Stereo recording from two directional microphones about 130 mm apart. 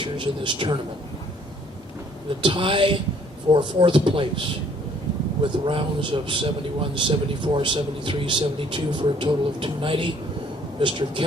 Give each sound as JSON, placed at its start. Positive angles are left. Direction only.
{"t": 0.0, "sound": "speech", "side_deg": -40}
{"t": 2.4, "sound": "speech", "side_deg": -40}